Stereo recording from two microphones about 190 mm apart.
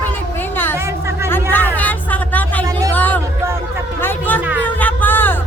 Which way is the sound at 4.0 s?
10° left (ahead or behind).